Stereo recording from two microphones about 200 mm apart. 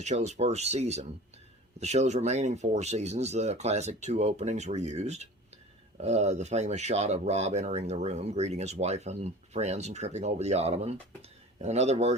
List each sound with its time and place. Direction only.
0.0 s speech: 35° right (ahead or behind)